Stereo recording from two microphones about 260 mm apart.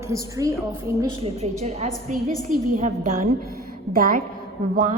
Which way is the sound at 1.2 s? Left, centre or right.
Right.